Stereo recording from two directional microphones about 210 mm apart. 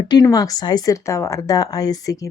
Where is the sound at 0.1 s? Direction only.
20° left (ahead or behind).